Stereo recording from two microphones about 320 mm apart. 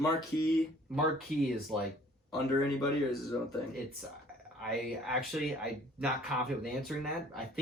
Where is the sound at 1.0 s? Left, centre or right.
Centre.